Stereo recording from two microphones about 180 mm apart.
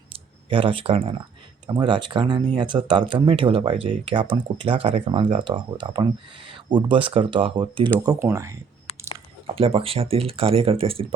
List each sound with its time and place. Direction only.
0.1 s clicking: 30° right (ahead or behind)
1.6 s speech: 25° right (ahead or behind)
9.6 s speech: 30° right (ahead or behind)